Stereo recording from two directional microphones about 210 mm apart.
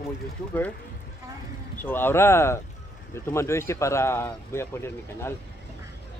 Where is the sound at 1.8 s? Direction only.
10° left (ahead or behind).